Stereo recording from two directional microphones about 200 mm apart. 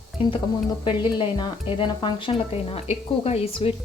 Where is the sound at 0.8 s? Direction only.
25° left (ahead or behind).